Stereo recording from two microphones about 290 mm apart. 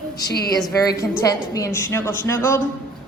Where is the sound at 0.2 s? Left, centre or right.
Left.